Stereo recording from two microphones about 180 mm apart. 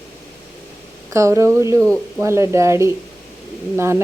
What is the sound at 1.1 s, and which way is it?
Speech, 15° right (ahead or behind).